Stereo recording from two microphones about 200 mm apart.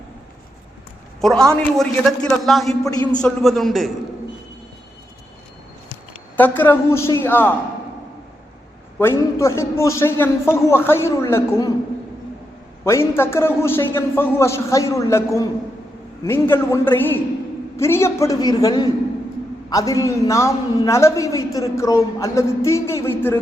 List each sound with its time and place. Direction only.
1.2 s a man's voice: 5° left (ahead or behind)
6.3 s a man's voice: 10° left (ahead or behind)
9.0 s a man's voice: 10° left (ahead or behind)
12.8 s a man's voice: 15° left (ahead or behind)